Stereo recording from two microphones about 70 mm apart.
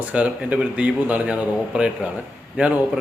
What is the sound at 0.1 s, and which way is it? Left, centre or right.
A man's voice, centre.